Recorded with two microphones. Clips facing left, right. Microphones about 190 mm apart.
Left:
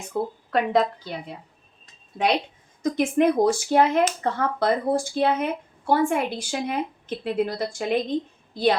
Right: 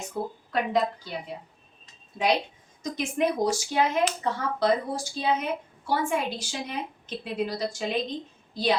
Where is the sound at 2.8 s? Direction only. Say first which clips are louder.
Left 7 dB; 55° left (ahead or behind).